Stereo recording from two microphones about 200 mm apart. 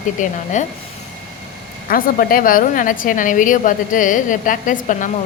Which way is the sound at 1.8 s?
45° left (ahead or behind).